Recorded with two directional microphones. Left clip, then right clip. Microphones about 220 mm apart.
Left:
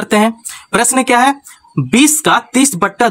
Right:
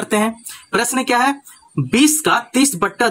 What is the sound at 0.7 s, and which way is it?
Speech, 30° left (ahead or behind).